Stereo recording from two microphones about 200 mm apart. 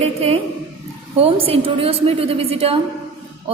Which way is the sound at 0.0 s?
30° right (ahead or behind).